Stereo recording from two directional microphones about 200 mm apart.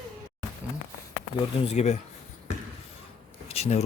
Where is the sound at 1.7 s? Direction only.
35° left (ahead or behind).